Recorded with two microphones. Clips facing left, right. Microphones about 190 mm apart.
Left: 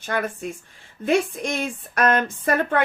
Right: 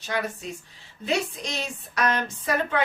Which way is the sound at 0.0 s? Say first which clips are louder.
Left 3 dB; 50° left (ahead or behind).